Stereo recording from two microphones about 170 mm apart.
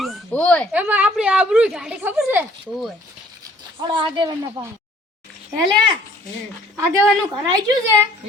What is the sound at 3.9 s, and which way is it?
Speech, 25° right (ahead or behind).